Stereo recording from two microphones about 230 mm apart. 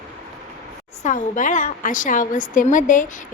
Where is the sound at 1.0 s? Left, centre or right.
Left.